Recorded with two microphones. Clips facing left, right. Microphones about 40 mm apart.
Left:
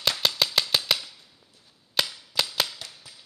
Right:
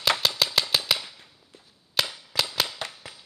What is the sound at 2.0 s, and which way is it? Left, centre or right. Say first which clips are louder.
Cap gun: even; centre.